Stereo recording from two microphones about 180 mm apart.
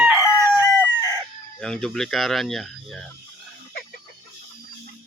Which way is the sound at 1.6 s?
5° left (ahead or behind).